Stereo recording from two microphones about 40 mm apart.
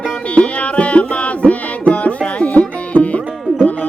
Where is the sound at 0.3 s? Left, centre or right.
Left.